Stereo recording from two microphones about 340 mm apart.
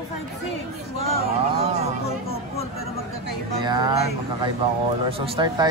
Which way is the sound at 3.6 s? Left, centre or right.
Centre.